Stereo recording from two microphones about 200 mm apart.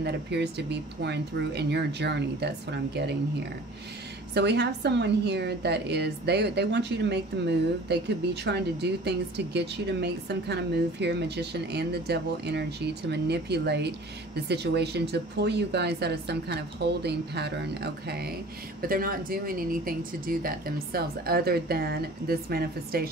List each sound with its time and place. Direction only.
0.0 s a woman's voice: 55° right (ahead or behind)
4.3 s a woman's voice: 55° right (ahead or behind)